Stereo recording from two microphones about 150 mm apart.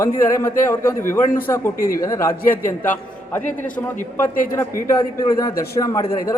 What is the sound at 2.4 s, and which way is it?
Speech, 70° left (ahead or behind).